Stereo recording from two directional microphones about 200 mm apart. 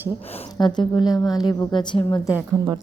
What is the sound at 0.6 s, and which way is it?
A woman's voice, 20° left (ahead or behind).